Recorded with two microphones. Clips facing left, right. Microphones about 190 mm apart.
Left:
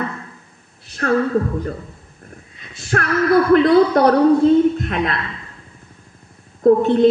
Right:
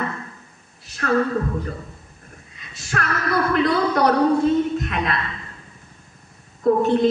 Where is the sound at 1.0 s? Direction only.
50° left (ahead or behind).